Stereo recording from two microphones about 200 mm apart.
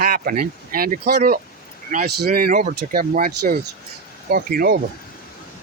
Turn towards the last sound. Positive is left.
turn(degrees=-45)  # may be behind; listen again after turning